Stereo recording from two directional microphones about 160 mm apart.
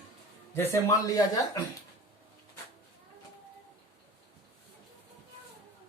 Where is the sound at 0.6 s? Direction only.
20° left (ahead or behind).